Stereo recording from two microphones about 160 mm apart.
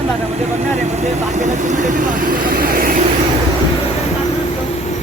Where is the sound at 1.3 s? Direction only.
45° right (ahead or behind).